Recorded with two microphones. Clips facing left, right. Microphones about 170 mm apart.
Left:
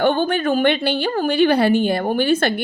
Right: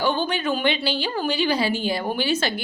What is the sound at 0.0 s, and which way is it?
A woman's voice, 55° left (ahead or behind).